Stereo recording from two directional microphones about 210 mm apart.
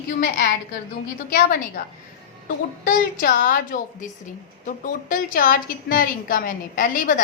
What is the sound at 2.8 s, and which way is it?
A woman's voice, 40° left (ahead or behind).